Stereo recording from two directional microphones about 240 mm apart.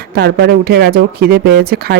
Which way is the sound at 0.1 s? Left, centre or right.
Right.